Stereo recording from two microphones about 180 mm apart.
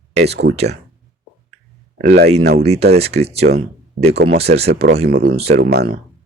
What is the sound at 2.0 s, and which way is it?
Speech, 65° right (ahead or behind).